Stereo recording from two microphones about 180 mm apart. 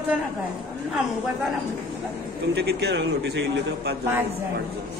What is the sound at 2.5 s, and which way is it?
A man's voice, 65° right (ahead or behind).